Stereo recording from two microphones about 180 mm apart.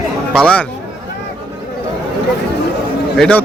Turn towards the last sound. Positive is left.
turn(degrees=5)  # may be behind; listen again after turning